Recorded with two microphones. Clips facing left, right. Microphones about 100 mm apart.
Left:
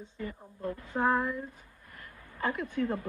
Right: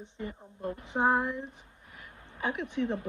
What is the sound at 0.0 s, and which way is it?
A woman's voice, 25° right (ahead or behind).